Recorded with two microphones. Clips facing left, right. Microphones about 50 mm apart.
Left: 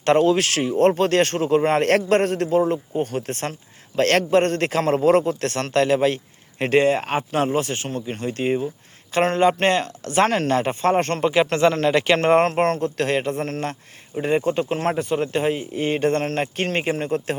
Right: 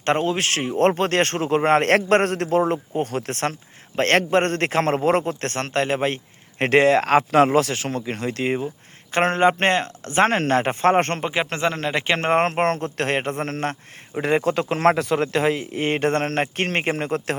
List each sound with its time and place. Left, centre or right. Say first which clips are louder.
0.0 s a man's voice: left 4 dB; right
2.9 s speech: even; right
3.9 s speech: left 1 dB; right
6.6 s speech: right 2 dB; right
9.1 s speech: even; right
10.9 s speech: right 1 dB; right
11.2 s speech: left 5 dB; centre; by 13.7 s right
14.2 s speech: even; right